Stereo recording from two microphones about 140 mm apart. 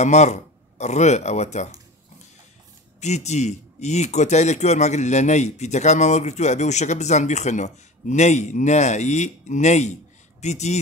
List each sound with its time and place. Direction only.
0.0 s speech: 55° left (ahead or behind)
3.0 s speech: 55° left (ahead or behind)